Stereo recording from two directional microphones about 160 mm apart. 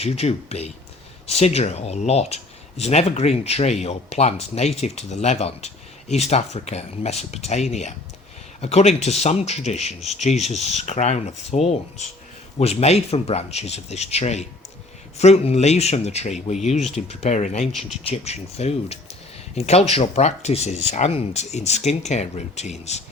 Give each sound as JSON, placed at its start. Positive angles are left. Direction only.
{"t": 0.0, "sound": "speech", "side_deg": 40}